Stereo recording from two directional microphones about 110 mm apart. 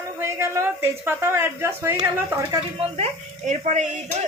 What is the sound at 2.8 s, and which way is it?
Speech, 65° right (ahead or behind).